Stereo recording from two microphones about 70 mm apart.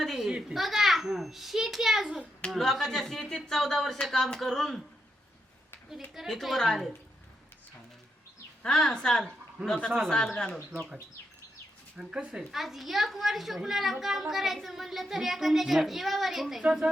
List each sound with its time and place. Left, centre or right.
0.0 s a child's voice: centre
6.1 s a child's voice: centre
8.6 s speech: centre
9.6 s speech: right
9.9 s a child's voice: centre
10.7 s speech: centre
11.9 s a child's voice: centre